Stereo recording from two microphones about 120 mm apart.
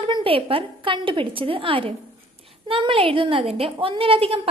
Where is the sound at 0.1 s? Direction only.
50° right (ahead or behind).